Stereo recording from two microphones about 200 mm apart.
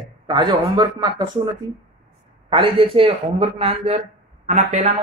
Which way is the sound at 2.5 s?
25° right (ahead or behind).